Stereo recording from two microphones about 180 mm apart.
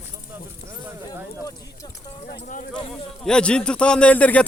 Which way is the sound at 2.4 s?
45° left (ahead or behind).